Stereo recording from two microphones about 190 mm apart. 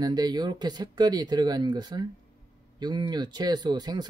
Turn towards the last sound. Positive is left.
turn(degrees=-20)  # may be behind; listen again after turning